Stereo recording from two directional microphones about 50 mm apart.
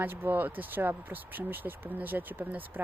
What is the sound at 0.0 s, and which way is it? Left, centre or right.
Speech, right.